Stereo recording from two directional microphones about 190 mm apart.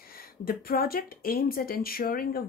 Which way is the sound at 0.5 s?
50° left (ahead or behind).